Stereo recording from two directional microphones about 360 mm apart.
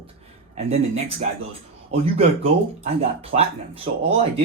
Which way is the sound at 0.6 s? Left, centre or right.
Centre.